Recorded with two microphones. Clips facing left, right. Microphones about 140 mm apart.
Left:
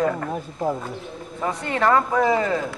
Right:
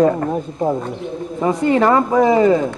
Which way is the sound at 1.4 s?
5° right (ahead or behind).